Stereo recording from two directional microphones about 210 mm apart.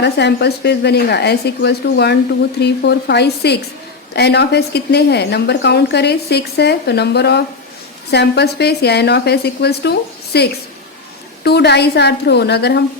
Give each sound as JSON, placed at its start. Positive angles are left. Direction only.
{"t": 0.0, "sound": "a woman's voice", "side_deg": 55}